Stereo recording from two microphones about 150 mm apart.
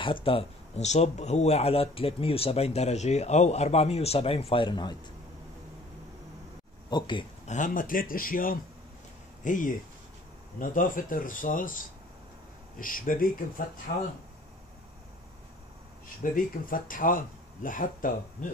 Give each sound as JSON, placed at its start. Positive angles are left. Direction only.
{"t": 0.0, "sound": "speech", "side_deg": 35}
{"t": 6.9, "sound": "speech", "side_deg": 30}
{"t": 7.4, "sound": "speech", "side_deg": 55}
{"t": 16.2, "sound": "speech", "side_deg": 65}